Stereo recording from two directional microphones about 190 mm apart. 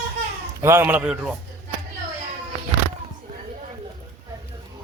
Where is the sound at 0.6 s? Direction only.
15° right (ahead or behind).